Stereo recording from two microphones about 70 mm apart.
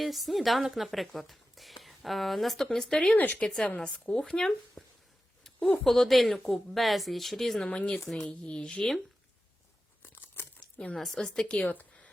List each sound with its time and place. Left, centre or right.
0.0 s a woman's voice: centre
3.2 s a woman's voice: left
3.4 s a woman's voice: centre
5.5 s speech: centre
5.8 s speech: centre
7.7 s a woman's voice: centre
7.9 s speech: centre
8.2 s a woman's voice: centre
10.0 s a sound: left
10.9 s a woman's voice: centre; by 11.9 s left